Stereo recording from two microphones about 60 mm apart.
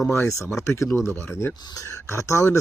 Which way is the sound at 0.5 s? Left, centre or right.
Left.